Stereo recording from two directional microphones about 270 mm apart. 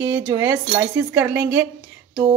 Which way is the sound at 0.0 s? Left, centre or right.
Centre.